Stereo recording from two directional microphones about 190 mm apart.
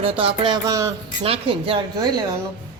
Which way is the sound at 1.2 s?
30° right (ahead or behind).